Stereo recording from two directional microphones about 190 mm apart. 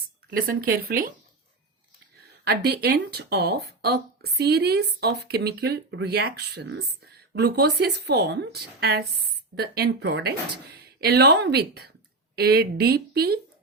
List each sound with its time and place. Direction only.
0.3 s speech: 50° right (ahead or behind)
2.4 s speech: 55° right (ahead or behind)